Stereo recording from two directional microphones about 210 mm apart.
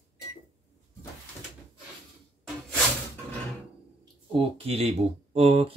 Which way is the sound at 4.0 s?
25° right (ahead or behind).